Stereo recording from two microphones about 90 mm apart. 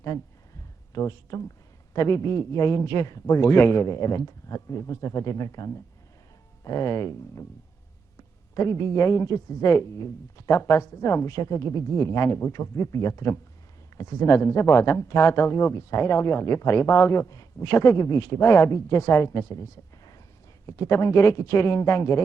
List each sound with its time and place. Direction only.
0.9 s a man's voice: 40° left (ahead or behind)
8.5 s a man's voice: 35° left (ahead or behind)